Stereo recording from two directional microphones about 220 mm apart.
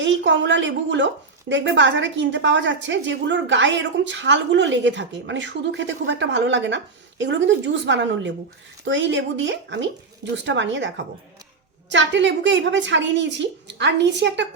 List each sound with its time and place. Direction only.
0.0 s a woman's voice: 55° right (ahead or behind)